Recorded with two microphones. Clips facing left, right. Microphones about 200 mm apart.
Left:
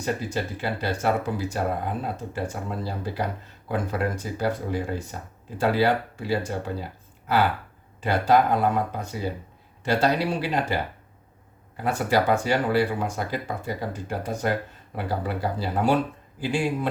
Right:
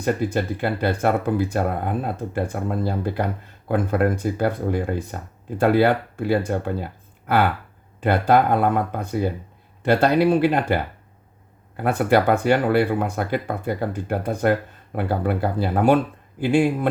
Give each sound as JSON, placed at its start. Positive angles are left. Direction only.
{"t": 0.0, "sound": "speech", "side_deg": -55}
{"t": 8.0, "sound": "speech", "side_deg": -55}
{"t": 11.8, "sound": "speech", "side_deg": -60}